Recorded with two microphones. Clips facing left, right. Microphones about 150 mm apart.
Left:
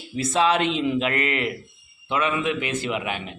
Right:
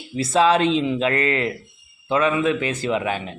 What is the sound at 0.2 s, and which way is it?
A man's voice, 35° right (ahead or behind).